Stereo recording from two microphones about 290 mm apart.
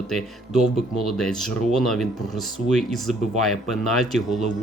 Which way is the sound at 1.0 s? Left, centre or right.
Centre.